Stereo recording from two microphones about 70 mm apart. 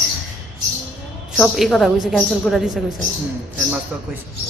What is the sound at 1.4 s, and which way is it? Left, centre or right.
A woman's voice, centre.